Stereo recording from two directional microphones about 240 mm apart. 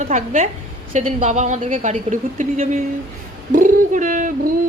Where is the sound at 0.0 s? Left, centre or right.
Right.